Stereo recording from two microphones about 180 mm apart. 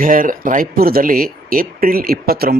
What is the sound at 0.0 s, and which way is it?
Speech, 50° right (ahead or behind).